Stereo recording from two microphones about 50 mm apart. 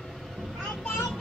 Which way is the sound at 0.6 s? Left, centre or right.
Centre.